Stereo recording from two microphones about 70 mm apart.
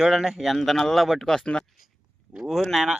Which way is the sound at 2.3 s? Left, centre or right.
Centre.